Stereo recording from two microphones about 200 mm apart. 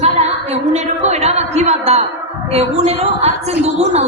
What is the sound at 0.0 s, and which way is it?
A woman's voice, 35° right (ahead or behind).